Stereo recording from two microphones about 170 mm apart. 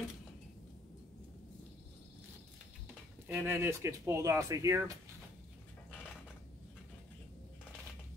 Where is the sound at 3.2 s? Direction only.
10° right (ahead or behind).